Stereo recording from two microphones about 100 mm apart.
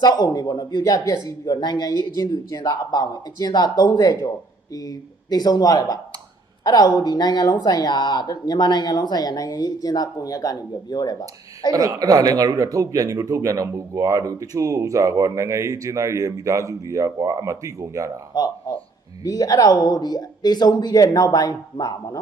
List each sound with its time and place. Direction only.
0.0 s speech: 40° left (ahead or behind)
11.7 s speech: 35° right (ahead or behind)
18.3 s speech: 40° left (ahead or behind)